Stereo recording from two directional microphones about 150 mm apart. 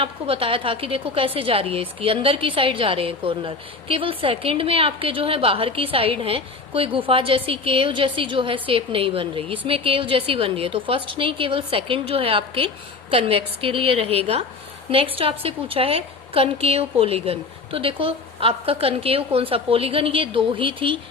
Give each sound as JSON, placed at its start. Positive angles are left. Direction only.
{"t": 0.0, "sound": "a woman's voice", "side_deg": -40}